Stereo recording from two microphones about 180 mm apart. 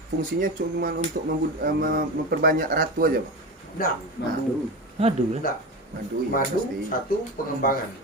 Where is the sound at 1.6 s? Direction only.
55° right (ahead or behind).